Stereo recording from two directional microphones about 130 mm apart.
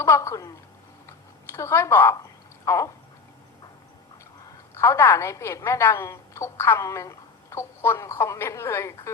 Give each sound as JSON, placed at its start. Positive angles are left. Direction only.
{"t": 0.0, "sound": "a woman's voice", "side_deg": 25}
{"t": 1.0, "sound": "a sound", "side_deg": 20}
{"t": 2.6, "sound": "a woman's voice", "side_deg": 25}
{"t": 4.8, "sound": "a woman's voice", "side_deg": 20}